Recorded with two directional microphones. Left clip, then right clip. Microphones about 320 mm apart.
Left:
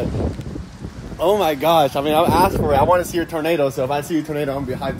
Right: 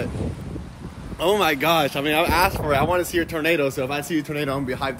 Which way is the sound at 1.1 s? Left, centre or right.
Centre.